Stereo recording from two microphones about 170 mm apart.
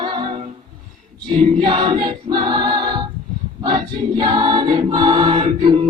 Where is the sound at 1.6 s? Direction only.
30° right (ahead or behind).